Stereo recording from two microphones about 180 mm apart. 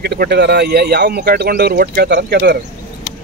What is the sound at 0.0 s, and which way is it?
Speech, 65° right (ahead or behind).